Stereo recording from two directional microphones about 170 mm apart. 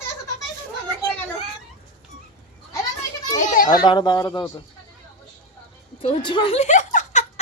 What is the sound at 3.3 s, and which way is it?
Goat, 50° left (ahead or behind).